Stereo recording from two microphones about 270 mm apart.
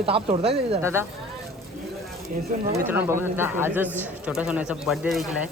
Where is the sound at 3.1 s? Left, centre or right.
Centre.